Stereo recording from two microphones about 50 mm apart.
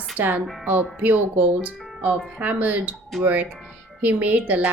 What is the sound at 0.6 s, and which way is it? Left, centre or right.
Speech, right.